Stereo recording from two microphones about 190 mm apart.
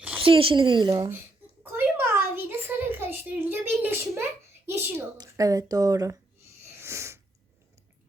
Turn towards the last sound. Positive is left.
turn(degrees=-15)  # may be behind; listen again after turning